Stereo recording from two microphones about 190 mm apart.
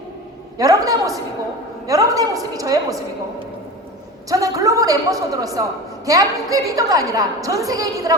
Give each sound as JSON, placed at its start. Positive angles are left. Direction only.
{"t": 0.6, "sound": "a woman's voice", "side_deg": -20}
{"t": 4.3, "sound": "a woman's voice", "side_deg": -20}